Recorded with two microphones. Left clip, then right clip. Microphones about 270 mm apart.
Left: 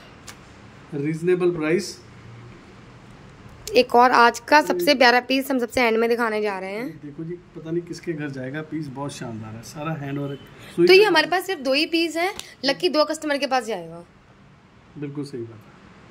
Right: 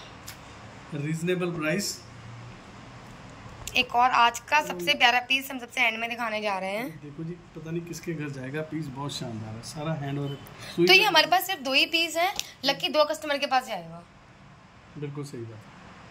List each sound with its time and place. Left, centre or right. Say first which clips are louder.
1.0 s speech: left 8 dB; centre
3.6 s a woman's voice: left 7 dB; centre